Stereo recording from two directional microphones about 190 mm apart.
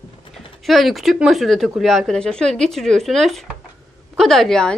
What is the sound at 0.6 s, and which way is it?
Speech, centre (ahead or behind).